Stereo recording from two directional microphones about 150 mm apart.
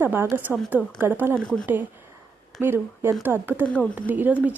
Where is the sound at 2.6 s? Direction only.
15° right (ahead or behind).